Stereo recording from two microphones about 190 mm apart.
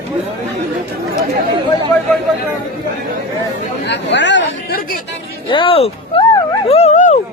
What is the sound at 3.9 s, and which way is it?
Chatter, 70° left (ahead or behind).